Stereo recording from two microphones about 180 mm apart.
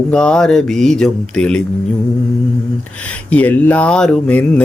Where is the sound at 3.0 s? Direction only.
10° left (ahead or behind).